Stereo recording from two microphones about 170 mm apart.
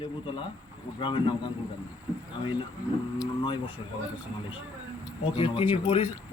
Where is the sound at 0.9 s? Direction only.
30° left (ahead or behind).